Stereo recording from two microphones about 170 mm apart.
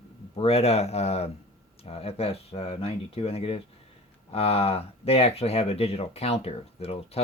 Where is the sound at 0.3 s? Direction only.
35° left (ahead or behind).